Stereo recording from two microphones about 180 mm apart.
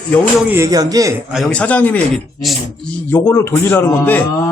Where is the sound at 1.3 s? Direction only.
5° left (ahead or behind).